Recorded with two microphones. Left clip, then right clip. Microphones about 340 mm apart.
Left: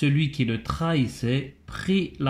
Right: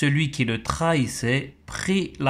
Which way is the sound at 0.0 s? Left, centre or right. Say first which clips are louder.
Right 2 dB; centre.